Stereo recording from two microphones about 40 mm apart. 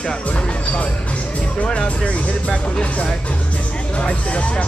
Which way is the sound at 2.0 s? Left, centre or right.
Left.